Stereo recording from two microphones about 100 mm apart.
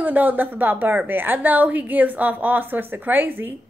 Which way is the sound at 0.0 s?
15° right (ahead or behind).